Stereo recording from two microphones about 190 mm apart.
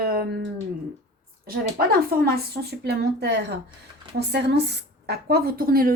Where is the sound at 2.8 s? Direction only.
60° right (ahead or behind).